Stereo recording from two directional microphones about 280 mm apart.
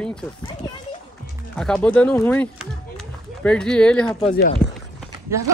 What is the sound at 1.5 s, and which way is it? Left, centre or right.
Speech, centre.